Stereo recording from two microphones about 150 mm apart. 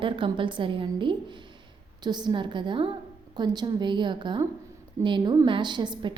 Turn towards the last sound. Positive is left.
turn(degrees=-30)  # may be behind; listen again after turning